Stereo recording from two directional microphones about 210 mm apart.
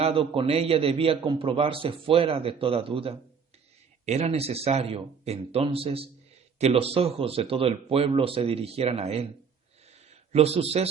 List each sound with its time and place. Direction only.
0.0 s a man's voice: 25° right (ahead or behind)
10.3 s a man's voice: 30° right (ahead or behind)